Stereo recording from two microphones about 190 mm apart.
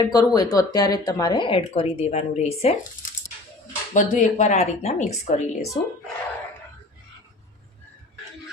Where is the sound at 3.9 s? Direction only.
40° left (ahead or behind).